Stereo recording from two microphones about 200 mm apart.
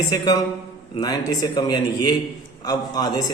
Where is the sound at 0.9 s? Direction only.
20° left (ahead or behind).